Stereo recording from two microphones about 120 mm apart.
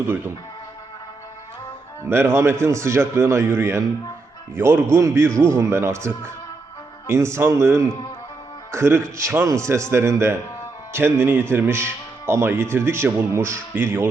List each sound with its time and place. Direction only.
2.0 s speech: 20° right (ahead or behind)